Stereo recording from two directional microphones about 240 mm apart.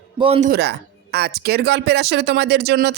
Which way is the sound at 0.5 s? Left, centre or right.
Right.